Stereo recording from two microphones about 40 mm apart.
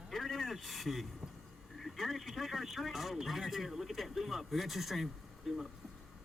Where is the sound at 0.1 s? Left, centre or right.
Centre.